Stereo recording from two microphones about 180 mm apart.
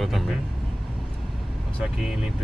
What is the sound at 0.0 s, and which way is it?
Vehicle, centre (ahead or behind).